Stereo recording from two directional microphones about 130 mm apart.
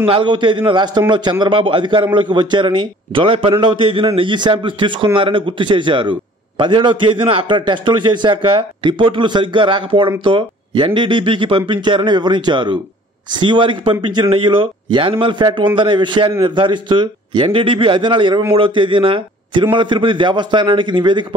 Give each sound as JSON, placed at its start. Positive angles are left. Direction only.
{"t": 0.0, "sound": "a man's voice", "side_deg": -40}